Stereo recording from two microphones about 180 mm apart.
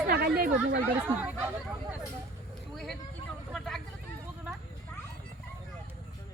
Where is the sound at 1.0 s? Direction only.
10° right (ahead or behind).